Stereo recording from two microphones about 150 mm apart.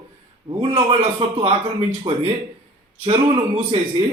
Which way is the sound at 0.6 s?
35° right (ahead or behind).